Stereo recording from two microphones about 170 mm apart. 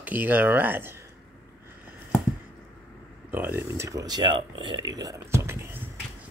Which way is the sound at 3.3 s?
10° right (ahead or behind).